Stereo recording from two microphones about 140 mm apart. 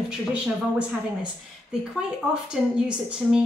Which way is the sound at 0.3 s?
10° right (ahead or behind).